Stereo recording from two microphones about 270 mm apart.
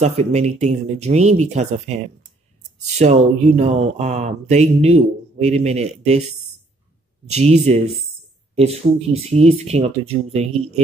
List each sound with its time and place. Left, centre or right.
0.0 s speech: right
2.8 s speech: right
7.2 s speech: right